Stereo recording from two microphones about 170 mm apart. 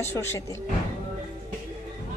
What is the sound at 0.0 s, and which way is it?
Speech, 15° left (ahead or behind).